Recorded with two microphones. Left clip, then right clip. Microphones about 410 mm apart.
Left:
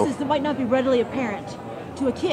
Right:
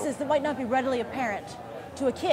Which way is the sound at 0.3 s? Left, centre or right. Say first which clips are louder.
Even; centre.